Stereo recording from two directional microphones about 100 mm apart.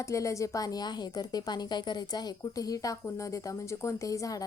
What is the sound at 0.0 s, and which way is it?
A woman's voice, 30° left (ahead or behind).